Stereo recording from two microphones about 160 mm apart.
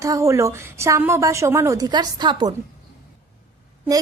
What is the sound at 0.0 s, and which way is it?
A woman's voice, 20° right (ahead or behind).